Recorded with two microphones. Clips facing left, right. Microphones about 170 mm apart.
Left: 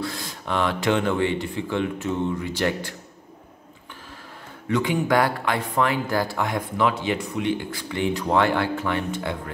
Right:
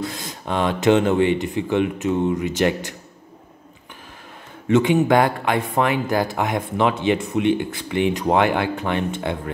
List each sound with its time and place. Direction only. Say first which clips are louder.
0.0 s speech: right 2 dB; 20° right (ahead or behind)
4.6 s speech: right 6 dB; 25° right (ahead or behind)